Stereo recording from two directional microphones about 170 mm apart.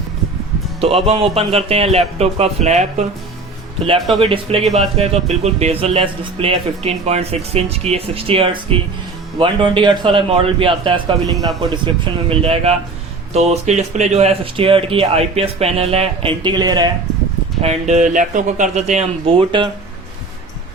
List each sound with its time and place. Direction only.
0.8 s speech: 35° right (ahead or behind)
4.2 s speech: 35° right (ahead or behind)
17.6 s speech: 40° right (ahead or behind)